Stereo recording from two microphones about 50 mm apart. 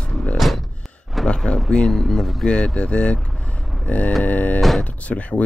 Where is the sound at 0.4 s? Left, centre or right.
Centre.